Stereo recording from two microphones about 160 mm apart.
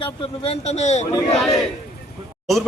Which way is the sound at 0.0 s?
35° left (ahead or behind).